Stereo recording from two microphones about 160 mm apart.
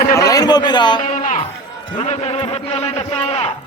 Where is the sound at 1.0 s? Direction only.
50° left (ahead or behind).